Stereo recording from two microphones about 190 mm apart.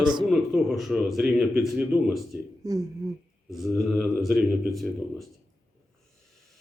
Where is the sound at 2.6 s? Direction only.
20° right (ahead or behind).